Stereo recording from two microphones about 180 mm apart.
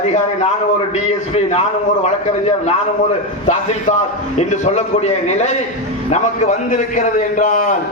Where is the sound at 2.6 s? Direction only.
40° left (ahead or behind).